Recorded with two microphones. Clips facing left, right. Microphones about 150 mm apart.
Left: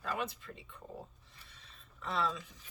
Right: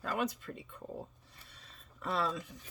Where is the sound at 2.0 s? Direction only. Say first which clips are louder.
Right 1 dB; 45° right (ahead or behind).